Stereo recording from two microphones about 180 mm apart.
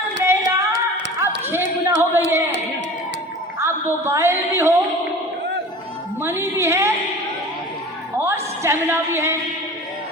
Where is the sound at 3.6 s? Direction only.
15° right (ahead or behind).